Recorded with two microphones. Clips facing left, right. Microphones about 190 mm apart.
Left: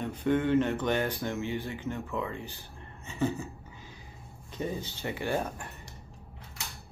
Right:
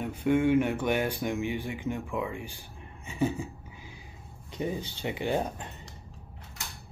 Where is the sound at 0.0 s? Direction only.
10° right (ahead or behind).